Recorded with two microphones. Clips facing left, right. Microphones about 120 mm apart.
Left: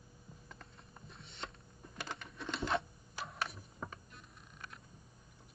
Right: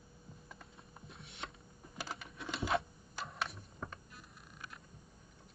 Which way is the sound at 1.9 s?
5° right (ahead or behind).